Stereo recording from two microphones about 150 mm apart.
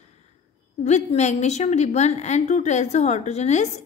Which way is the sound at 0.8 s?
50° left (ahead or behind).